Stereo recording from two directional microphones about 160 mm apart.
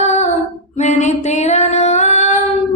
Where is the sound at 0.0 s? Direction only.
45° left (ahead or behind).